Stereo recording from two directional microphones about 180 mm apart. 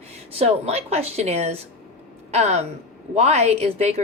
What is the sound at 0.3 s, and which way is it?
Speech, 35° right (ahead or behind).